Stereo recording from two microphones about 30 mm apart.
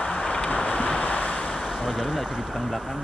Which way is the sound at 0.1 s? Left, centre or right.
Left.